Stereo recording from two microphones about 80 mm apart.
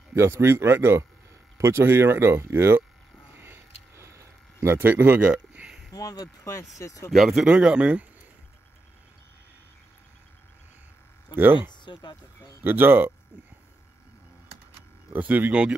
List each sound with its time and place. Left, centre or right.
0.1 s speech: right
3.3 s a sound: right
5.9 s speech: left
7.1 s speech: centre
7.4 s speech: centre
11.3 s speech: right
11.7 s speech: left
12.6 s speech: right
15.1 s speech: right